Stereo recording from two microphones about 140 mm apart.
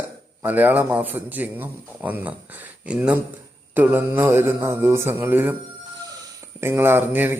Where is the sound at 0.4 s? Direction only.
10° right (ahead or behind).